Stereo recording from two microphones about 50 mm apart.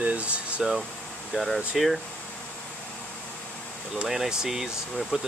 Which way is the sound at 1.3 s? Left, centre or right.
Centre.